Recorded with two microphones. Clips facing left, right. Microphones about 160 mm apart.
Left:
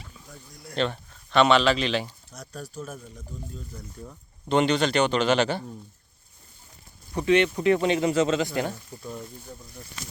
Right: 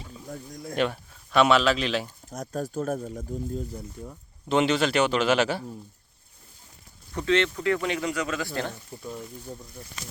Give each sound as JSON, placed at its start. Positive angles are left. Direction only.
{"t": 0.3, "sound": "speech", "side_deg": -45}
{"t": 0.8, "sound": "speech", "side_deg": -5}
{"t": 2.3, "sound": "speech", "side_deg": -50}
{"t": 4.0, "sound": "speech", "side_deg": -5}
{"t": 7.1, "sound": "speech", "side_deg": 15}
{"t": 8.9, "sound": "speech", "side_deg": -5}